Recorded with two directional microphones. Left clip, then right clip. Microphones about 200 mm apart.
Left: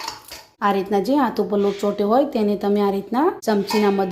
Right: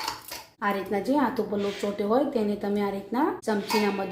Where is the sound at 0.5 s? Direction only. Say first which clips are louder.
Left 8 dB; 55° left (ahead or behind).